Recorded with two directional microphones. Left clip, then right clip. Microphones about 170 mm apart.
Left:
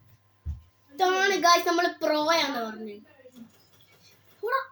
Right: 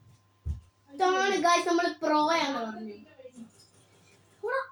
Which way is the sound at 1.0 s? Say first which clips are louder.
Left 2 dB; 45° left (ahead or behind).